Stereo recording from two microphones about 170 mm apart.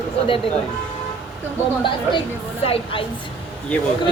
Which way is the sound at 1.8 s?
30° left (ahead or behind).